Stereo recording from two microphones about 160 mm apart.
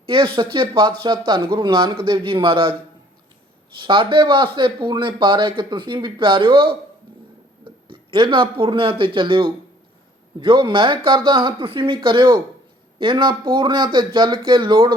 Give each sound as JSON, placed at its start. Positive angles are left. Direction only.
{"t": 0.0, "sound": "speech", "side_deg": -35}
{"t": 3.8, "sound": "speech", "side_deg": -30}